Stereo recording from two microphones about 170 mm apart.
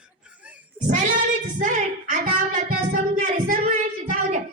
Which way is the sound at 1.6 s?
50° right (ahead or behind).